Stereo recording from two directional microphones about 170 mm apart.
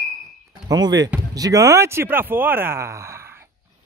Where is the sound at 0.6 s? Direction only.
25° right (ahead or behind).